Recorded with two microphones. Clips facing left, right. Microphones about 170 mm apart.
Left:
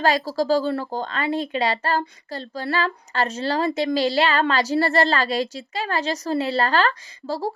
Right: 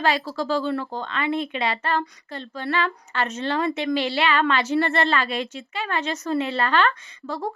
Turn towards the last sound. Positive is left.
turn(degrees=35)  # may be behind; listen again after turning